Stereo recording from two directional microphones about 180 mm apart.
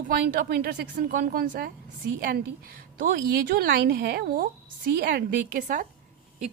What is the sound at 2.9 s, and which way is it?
A woman's voice, 55° right (ahead or behind).